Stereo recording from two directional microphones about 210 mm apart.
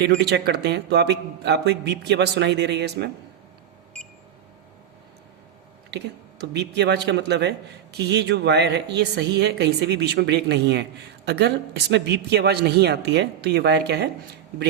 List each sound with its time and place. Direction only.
0.0 s a man's voice: 55° right (ahead or behind)
6.5 s a man's voice: 55° right (ahead or behind)